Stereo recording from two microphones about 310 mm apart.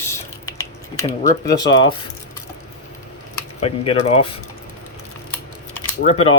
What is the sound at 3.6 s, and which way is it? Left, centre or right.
Speech, centre.